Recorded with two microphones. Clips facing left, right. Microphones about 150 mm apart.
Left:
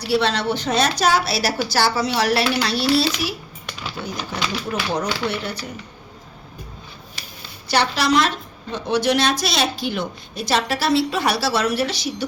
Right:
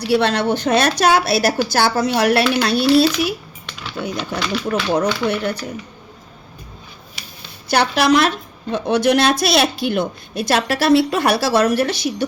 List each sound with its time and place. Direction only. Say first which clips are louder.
0.1 s a woman's voice: right 3 dB; 55° right (ahead or behind)
7.7 s a woman's voice: right 4 dB; 55° right (ahead or behind)